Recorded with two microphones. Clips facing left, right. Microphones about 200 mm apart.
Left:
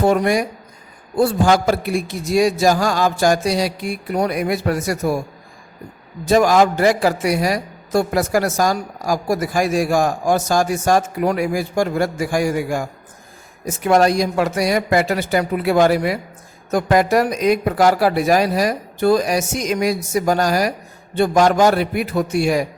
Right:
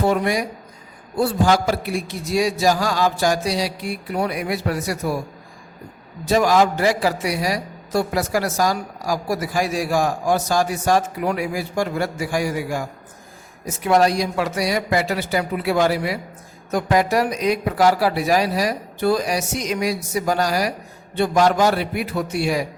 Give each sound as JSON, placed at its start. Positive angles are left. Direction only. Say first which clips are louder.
{"t": 0.0, "sound": "a man's voice", "louder": "left 4 dB", "side_deg": 45}
{"t": 6.2, "sound": "a man's voice", "louder": "left 3 dB", "side_deg": 50}